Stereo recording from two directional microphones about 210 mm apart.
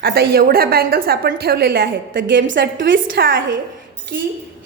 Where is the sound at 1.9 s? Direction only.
60° right (ahead or behind).